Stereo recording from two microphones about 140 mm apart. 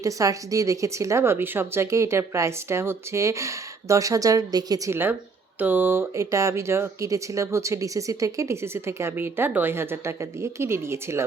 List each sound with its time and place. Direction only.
0.0 s speech: 25° right (ahead or behind)
5.5 s speech: 15° right (ahead or behind)